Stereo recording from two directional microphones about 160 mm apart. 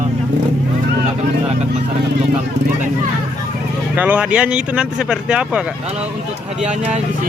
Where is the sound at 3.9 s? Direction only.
10° right (ahead or behind).